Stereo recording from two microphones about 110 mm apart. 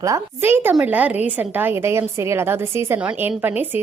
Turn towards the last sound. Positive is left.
turn(degrees=-15)  # may be behind; listen again after turning